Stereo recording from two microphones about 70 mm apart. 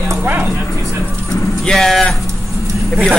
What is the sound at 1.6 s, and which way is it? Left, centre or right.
Speech, centre.